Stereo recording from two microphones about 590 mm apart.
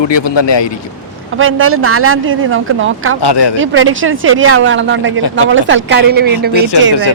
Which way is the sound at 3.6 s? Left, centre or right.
Centre.